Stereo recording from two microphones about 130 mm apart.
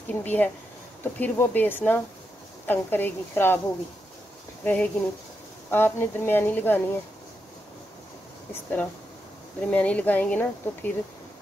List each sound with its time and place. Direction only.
0.1 s speech: 15° left (ahead or behind)
4.6 s speech: 10° left (ahead or behind)
9.6 s speech: 10° left (ahead or behind)